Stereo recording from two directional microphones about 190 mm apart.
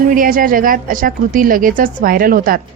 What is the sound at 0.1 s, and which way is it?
Speech, 45° right (ahead or behind).